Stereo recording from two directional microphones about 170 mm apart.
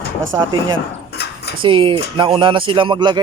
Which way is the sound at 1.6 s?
30° right (ahead or behind).